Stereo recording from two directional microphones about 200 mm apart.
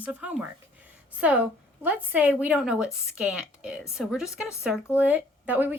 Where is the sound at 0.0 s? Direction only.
5° right (ahead or behind).